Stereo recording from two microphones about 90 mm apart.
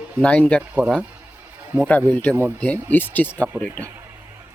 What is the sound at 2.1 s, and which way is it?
Speech, 15° left (ahead or behind).